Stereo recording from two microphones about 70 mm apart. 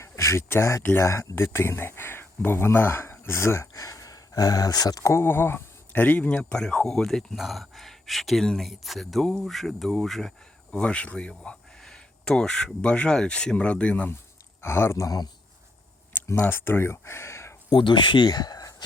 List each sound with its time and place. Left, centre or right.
0.0 s speech: left
3.8 s speech: left
5.1 s speech: left
14.6 s speech: left
15.0 s a man's voice: left
16.4 s speech: left
18.2 s speech: left